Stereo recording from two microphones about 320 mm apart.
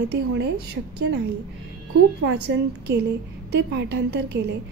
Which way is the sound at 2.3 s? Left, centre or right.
Right.